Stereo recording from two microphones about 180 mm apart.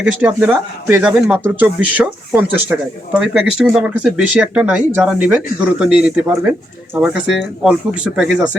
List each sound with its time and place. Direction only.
0.0 s speech: 10° right (ahead or behind)